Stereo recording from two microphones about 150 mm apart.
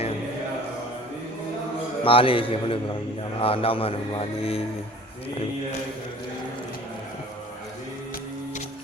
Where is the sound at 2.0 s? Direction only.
35° left (ahead or behind).